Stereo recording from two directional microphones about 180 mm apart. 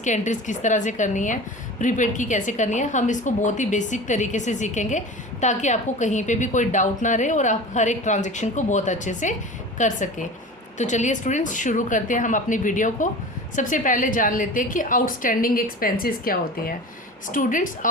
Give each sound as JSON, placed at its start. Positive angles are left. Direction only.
{"t": 0.0, "sound": "a woman's voice", "side_deg": 45}